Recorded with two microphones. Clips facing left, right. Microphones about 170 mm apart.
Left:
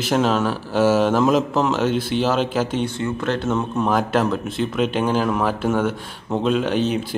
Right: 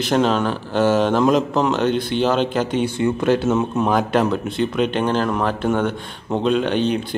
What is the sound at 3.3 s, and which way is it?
Speech, 5° right (ahead or behind).